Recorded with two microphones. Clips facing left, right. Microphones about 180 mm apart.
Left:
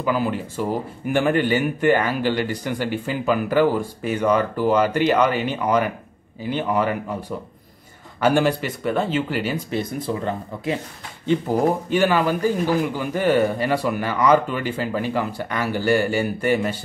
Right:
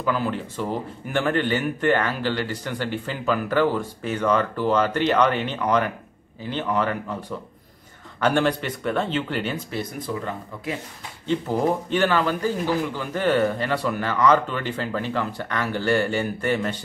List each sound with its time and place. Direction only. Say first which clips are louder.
0.0 s a man's voice: left 2 dB; 10° left (ahead or behind)
9.7 s speech: left 4 dB; 25° left (ahead or behind)
11.2 s a man's voice: left 3 dB; 10° left (ahead or behind)